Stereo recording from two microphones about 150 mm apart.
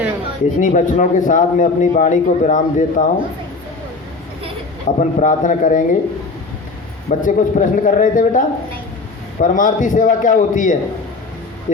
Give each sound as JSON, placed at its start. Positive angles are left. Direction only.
{"t": 0.6, "sound": "a man's voice", "side_deg": 55}
{"t": 4.9, "sound": "a man's voice", "side_deg": 55}
{"t": 7.1, "sound": "a man's voice", "side_deg": 60}